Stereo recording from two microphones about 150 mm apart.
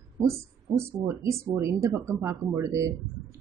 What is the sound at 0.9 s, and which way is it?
Speech, 20° right (ahead or behind).